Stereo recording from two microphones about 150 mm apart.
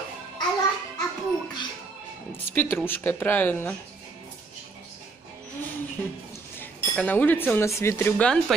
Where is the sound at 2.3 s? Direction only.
15° left (ahead or behind).